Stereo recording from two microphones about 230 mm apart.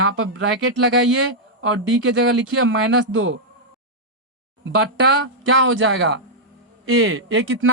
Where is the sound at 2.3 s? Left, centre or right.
Right.